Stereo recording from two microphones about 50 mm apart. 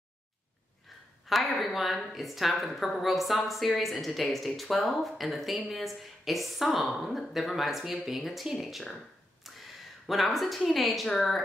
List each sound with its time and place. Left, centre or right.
1.3 s a woman's voice: centre
9.4 s a sound: centre
10.7 s a woman's voice: centre